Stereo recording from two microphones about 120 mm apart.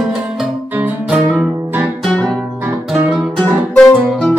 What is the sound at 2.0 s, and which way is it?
Music, 5° left (ahead or behind).